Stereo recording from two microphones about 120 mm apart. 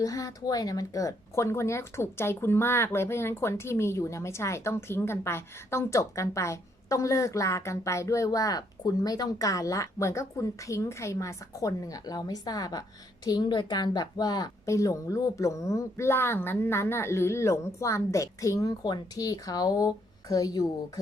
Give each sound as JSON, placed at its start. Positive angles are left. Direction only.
{"t": 0.0, "sound": "speech", "side_deg": 30}